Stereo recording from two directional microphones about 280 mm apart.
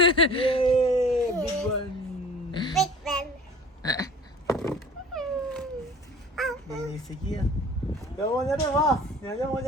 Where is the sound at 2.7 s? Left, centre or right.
Centre.